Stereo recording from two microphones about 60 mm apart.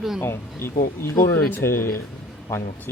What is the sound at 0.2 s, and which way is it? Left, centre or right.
Speech, left.